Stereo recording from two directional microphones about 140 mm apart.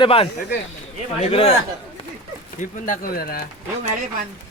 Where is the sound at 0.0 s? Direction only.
40° left (ahead or behind).